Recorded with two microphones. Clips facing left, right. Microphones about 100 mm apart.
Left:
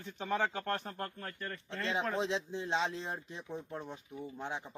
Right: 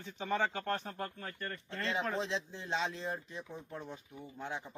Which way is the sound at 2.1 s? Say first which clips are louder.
Left 2 dB; 20° left (ahead or behind).